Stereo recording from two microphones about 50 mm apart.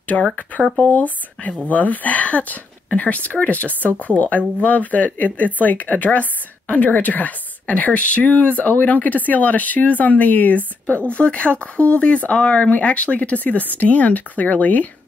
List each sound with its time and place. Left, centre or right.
0.1 s speech: left
0.9 s speech: left